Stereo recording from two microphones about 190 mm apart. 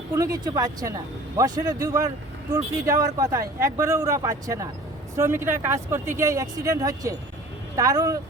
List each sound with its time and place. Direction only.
0.1 s speech: 15° right (ahead or behind)